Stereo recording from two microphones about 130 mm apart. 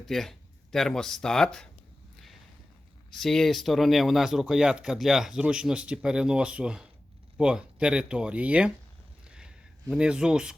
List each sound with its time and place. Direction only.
0.0 s speech: centre (ahead or behind)
3.1 s speech: centre (ahead or behind)
9.2 s a sound: 5° right (ahead or behind)
9.9 s speech: 5° right (ahead or behind)